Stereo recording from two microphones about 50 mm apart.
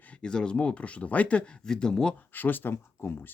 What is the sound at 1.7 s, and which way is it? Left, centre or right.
Speech, centre.